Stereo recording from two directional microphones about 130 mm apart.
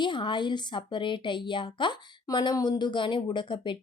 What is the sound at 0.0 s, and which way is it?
Speech, 40° left (ahead or behind).